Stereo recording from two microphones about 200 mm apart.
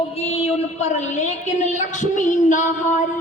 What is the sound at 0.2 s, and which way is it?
A woman's voice, 30° left (ahead or behind).